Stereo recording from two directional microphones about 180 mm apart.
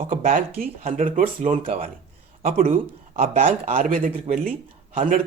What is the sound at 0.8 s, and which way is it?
Speech, 40° right (ahead or behind).